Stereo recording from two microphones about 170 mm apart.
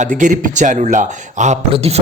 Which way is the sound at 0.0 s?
45° right (ahead or behind).